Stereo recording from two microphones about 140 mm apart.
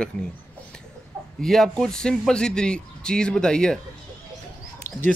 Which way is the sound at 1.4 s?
5° left (ahead or behind).